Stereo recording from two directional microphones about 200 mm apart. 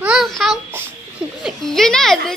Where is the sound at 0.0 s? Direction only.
Centre (ahead or behind).